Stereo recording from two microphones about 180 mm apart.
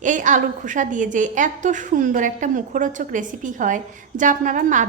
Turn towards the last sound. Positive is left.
turn(degrees=-45)  # may be behind; listen again after turning